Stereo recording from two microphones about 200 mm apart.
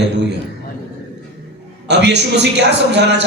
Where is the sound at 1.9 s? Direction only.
60° right (ahead or behind).